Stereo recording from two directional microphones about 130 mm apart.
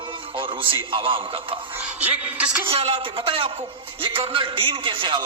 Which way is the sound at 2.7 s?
50° right (ahead or behind).